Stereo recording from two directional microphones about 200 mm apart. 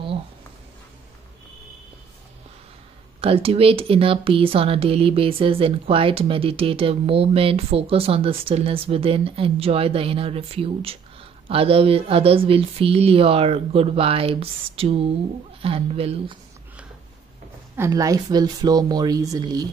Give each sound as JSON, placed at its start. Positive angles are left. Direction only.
{"t": 3.2, "sound": "speech", "side_deg": -30}
{"t": 17.7, "sound": "speech", "side_deg": -15}